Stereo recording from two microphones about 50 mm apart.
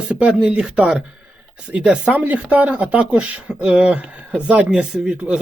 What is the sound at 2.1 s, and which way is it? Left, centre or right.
Speech, right.